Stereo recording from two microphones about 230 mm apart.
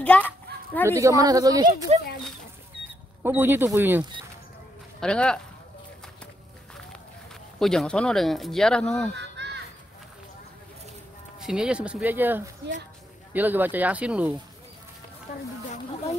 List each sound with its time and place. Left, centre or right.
0.0 s a child's voice: centre
0.8 s speech: centre
3.2 s speech: centre
5.0 s speech: centre
7.5 s speech: centre
9.1 s caw: right
11.4 s speech: centre